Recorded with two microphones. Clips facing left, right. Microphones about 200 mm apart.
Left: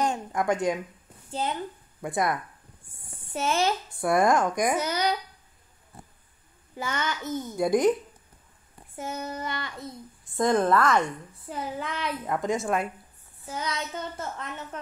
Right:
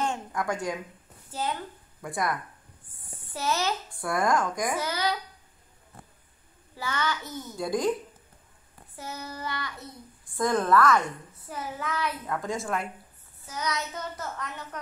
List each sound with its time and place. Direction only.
0.3 s a woman's voice: 25° left (ahead or behind)
2.0 s speech: 25° left (ahead or behind)
3.3 s a woman's voice: 25° left (ahead or behind)
6.8 s a woman's voice: 20° left (ahead or behind)
8.9 s a woman's voice: 20° left (ahead or behind)